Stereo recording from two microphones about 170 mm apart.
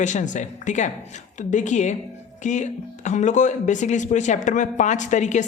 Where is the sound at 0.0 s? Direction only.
45° left (ahead or behind).